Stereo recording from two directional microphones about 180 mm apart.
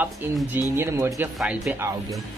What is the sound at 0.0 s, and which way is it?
Speech, 10° right (ahead or behind).